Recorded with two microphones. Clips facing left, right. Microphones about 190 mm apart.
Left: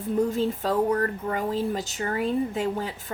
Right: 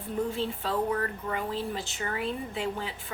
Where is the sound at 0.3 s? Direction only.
40° left (ahead or behind).